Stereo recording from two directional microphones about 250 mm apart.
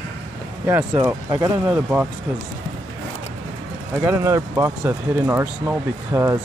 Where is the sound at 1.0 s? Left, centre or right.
Centre.